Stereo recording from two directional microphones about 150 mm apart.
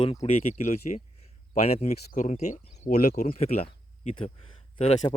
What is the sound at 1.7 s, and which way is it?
Speech, 45° left (ahead or behind).